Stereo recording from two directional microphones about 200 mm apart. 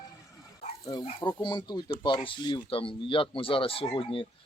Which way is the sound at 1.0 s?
20° left (ahead or behind).